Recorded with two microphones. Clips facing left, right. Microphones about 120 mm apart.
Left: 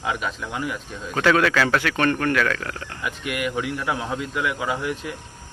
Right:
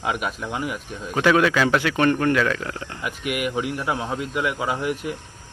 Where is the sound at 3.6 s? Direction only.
40° right (ahead or behind).